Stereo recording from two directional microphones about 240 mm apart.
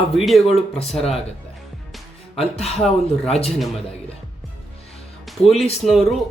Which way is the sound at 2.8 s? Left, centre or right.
Centre.